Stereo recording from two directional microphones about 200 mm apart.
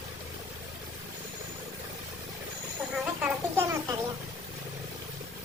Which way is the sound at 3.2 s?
10° right (ahead or behind).